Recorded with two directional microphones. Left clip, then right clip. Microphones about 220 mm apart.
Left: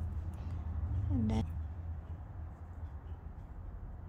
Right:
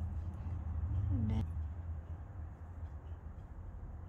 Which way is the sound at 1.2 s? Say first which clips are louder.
Left 6 dB; 45° left (ahead or behind).